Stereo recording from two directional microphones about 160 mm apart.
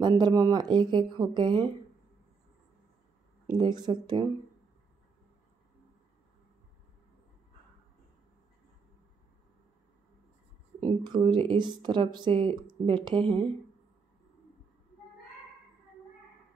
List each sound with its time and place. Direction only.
0.0 s speech: 25° right (ahead or behind)
3.4 s speech: 25° right (ahead or behind)
10.8 s speech: 25° right (ahead or behind)